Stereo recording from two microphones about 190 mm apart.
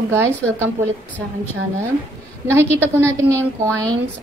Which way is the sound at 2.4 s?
15° right (ahead or behind).